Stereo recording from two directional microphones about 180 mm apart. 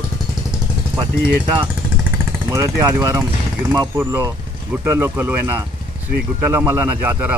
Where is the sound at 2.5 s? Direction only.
20° right (ahead or behind).